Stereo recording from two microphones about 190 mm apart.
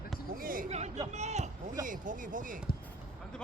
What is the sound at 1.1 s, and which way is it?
Speech, 35° right (ahead or behind).